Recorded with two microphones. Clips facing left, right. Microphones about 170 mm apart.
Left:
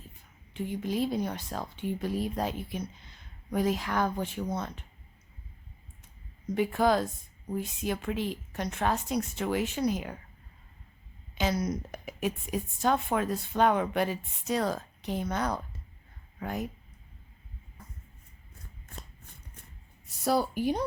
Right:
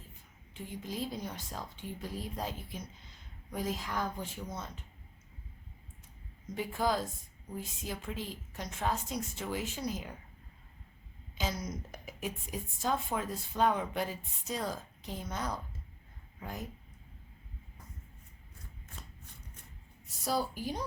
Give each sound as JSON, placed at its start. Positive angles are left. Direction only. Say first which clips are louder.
{"t": 0.5, "sound": "a woman's voice", "louder": "left 9 dB", "side_deg": 70}
{"t": 6.5, "sound": "a woman's voice", "louder": "left 7 dB", "side_deg": 65}
{"t": 11.3, "sound": "a woman's voice", "louder": "left 8 dB", "side_deg": 70}
{"t": 20.2, "sound": "a woman's voice", "louder": "left 7 dB", "side_deg": 65}